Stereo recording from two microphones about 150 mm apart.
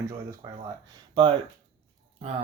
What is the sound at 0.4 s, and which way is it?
Speech, 25° right (ahead or behind).